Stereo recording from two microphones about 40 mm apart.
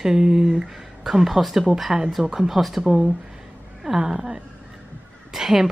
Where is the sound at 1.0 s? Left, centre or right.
Centre.